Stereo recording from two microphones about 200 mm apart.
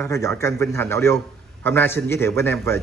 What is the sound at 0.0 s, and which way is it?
A man's voice, 15° left (ahead or behind).